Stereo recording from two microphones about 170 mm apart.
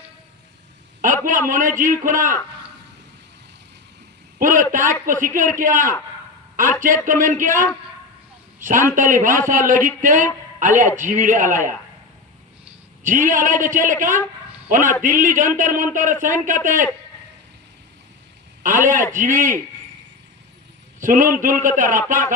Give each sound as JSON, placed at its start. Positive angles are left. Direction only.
{"t": 1.0, "sound": "a man's voice", "side_deg": -50}
{"t": 4.4, "sound": "a man's voice", "side_deg": -50}
{"t": 9.0, "sound": "a man's voice", "side_deg": -50}
{"t": 13.0, "sound": "a man's voice", "side_deg": -50}
{"t": 19.1, "sound": "a man's voice", "side_deg": -50}
{"t": 21.0, "sound": "a man's voice", "side_deg": -50}